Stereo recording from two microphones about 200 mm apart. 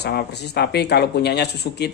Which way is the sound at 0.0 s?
55° left (ahead or behind).